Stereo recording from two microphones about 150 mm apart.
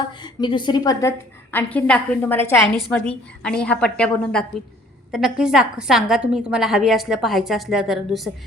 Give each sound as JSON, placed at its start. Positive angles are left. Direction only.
{"t": 0.2, "sound": "a woman's voice", "side_deg": 30}
{"t": 1.0, "sound": "a woman's voice", "side_deg": 15}
{"t": 5.1, "sound": "a woman's voice", "side_deg": -5}